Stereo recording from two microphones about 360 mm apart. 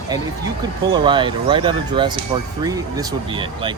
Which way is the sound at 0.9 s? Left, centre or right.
Centre.